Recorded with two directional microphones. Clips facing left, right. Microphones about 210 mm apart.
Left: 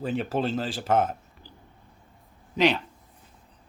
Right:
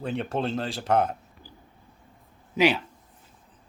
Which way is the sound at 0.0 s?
Centre (ahead or behind).